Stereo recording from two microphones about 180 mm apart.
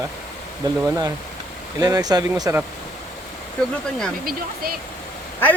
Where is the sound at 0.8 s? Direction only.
20° right (ahead or behind).